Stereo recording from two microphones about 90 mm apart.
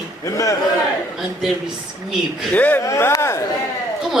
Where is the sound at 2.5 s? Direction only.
15° left (ahead or behind).